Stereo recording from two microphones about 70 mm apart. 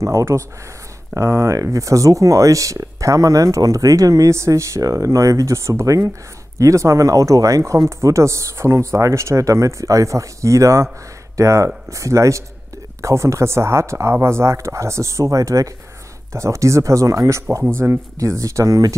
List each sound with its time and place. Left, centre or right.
0.0 s speech: right